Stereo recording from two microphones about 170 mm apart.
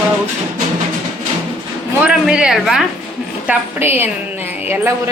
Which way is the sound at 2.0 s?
5° right (ahead or behind).